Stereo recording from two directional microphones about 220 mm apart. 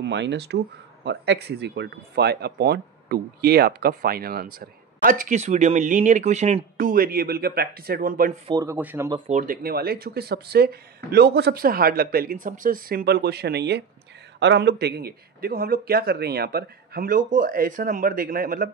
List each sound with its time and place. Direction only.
0.0 s speech: 50° right (ahead or behind)
8.5 s speech: 15° right (ahead or behind)
9.3 s speech: 35° right (ahead or behind)